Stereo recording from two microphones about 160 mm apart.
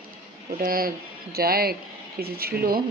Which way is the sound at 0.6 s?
65° right (ahead or behind).